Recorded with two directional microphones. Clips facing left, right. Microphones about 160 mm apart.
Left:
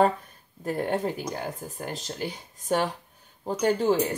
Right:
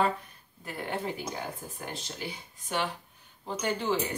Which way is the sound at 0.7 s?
45° left (ahead or behind).